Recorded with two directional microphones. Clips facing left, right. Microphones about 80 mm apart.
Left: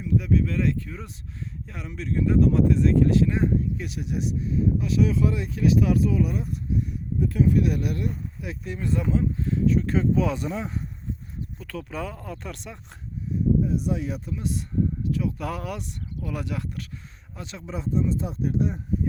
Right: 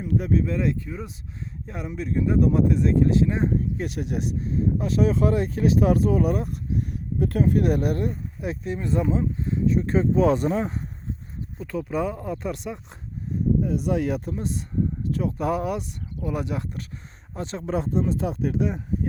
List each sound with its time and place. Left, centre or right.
0.0 s a sound: right
0.4 s speech: centre
3.8 s speech: right
10.2 s speech: right
11.6 s speech: right
13.7 s speech: right
14.3 s speech: right
15.1 s a sound: right
15.4 s speech: right
17.3 s speech: right
17.7 s speech: right